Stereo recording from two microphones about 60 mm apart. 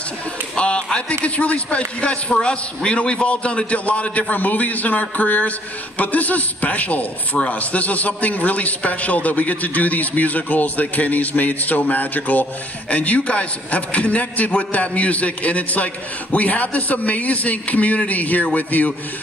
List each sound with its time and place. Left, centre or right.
0.6 s a man's voice: centre